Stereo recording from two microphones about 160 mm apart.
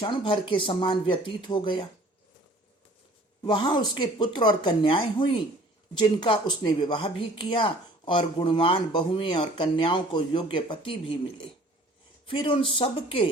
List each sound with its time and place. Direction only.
0.0 s speech: 30° left (ahead or behind)
3.4 s speech: 30° left (ahead or behind)
12.3 s speech: 30° left (ahead or behind)